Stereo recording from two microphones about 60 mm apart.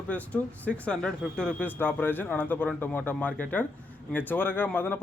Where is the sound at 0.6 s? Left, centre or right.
Left.